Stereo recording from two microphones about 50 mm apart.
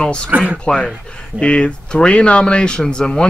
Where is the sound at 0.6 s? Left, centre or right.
Centre.